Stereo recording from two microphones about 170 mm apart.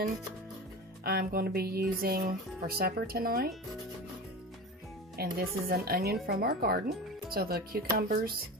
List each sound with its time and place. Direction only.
1.0 s speech: 65° right (ahead or behind)
5.1 s speech: 65° right (ahead or behind)